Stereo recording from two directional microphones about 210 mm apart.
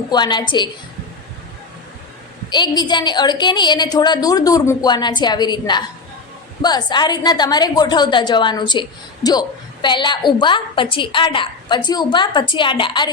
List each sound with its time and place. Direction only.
0.1 s a woman's voice: 20° left (ahead or behind)
2.5 s a woman's voice: 20° left (ahead or behind)